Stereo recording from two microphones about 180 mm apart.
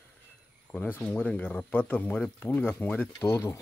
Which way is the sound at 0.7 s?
10° left (ahead or behind).